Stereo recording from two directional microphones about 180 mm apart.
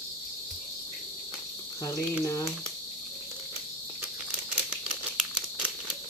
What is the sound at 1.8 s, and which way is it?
Cricket, 20° left (ahead or behind).